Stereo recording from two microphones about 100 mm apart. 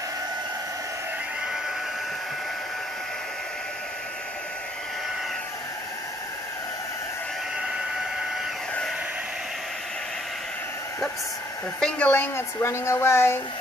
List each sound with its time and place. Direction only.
11.8 s a woman's voice: 15° left (ahead or behind)